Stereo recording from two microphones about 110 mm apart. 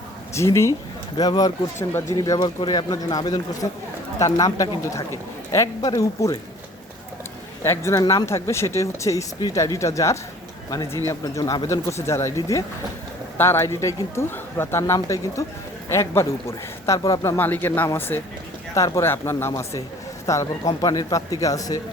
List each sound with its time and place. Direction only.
0.3 s speech: 25° left (ahead or behind)
1.9 s speech: 25° left (ahead or behind)
7.6 s speech: 25° left (ahead or behind)
17.3 s speech: 20° left (ahead or behind)